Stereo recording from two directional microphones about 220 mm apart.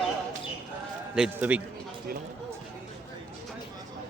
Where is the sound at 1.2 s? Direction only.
5° right (ahead or behind).